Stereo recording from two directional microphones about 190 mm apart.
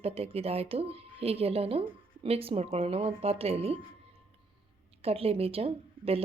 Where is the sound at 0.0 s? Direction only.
30° right (ahead or behind).